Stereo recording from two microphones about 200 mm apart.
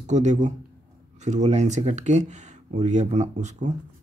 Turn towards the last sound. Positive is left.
turn(degrees=-35)  # may be behind; listen again after turning